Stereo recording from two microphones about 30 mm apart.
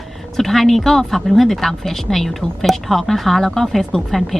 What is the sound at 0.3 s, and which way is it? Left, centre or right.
A woman's voice, centre.